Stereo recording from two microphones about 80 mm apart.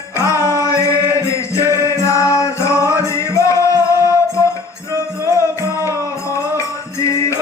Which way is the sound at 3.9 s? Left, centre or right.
Right.